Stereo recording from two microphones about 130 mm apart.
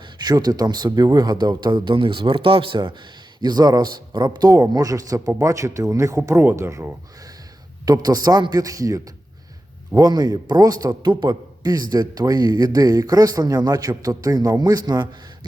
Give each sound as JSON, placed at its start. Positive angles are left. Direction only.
{"t": 0.2, "sound": "a man's voice", "side_deg": -30}